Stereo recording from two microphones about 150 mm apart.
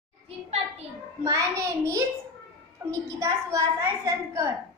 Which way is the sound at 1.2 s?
20° right (ahead or behind).